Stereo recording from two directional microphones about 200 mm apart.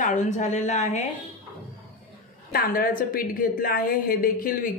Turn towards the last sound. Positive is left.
turn(degrees=45)  # may be behind; listen again after turning